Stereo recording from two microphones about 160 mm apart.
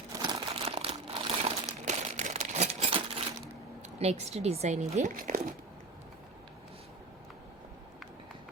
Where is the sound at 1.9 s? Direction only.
50° right (ahead or behind).